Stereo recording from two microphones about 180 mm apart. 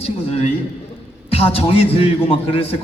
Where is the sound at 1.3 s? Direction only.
30° left (ahead or behind).